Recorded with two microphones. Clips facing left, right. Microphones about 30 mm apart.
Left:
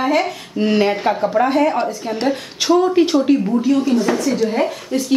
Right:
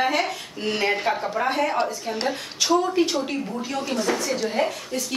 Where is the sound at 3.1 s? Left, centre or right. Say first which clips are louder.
Left 11 dB; centre.